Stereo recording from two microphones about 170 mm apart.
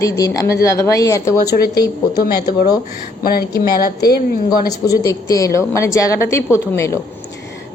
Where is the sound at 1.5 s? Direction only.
65° left (ahead or behind).